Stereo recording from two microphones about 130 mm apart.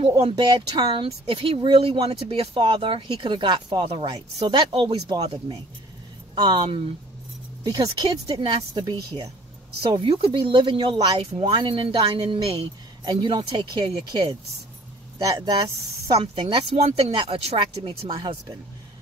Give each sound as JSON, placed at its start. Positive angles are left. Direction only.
{"t": 0.2, "sound": "speech", "side_deg": -35}
{"t": 6.3, "sound": "speech", "side_deg": -35}
{"t": 9.9, "sound": "speech", "side_deg": -45}
{"t": 16.2, "sound": "speech", "side_deg": -45}
{"t": 17.1, "sound": "speech", "side_deg": -40}